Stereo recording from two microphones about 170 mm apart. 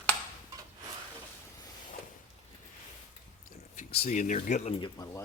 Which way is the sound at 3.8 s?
40° left (ahead or behind).